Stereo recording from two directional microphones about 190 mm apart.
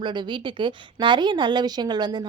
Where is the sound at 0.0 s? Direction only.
25° right (ahead or behind).